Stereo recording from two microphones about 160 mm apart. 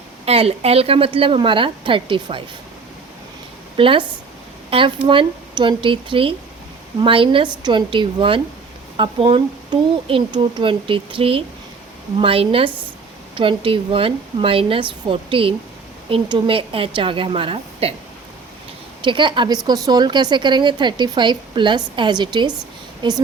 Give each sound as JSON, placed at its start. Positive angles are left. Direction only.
{"t": 0.3, "sound": "speech", "side_deg": -40}
{"t": 3.8, "sound": "speech", "side_deg": -35}
{"t": 19.0, "sound": "speech", "side_deg": -30}